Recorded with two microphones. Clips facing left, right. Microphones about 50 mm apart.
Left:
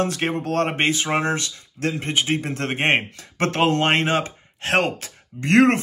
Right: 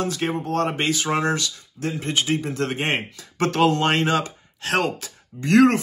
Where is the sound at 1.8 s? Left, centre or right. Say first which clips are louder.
Left 3 dB; left.